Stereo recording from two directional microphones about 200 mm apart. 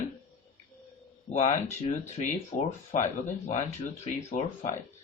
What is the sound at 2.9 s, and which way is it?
Speech, 35° left (ahead or behind).